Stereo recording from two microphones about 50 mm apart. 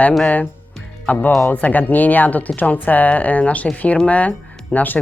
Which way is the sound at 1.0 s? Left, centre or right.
Left.